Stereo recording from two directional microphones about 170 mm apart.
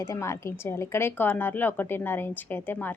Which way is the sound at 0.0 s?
15° left (ahead or behind).